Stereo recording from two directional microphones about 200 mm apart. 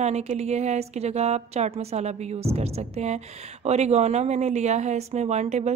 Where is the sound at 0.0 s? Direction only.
35° right (ahead or behind).